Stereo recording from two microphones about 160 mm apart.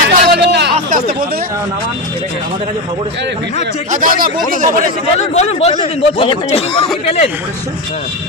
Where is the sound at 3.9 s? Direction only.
60° right (ahead or behind).